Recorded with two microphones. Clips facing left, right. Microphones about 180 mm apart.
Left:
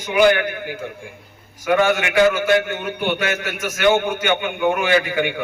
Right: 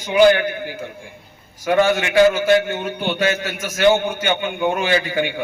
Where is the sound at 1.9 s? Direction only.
30° right (ahead or behind).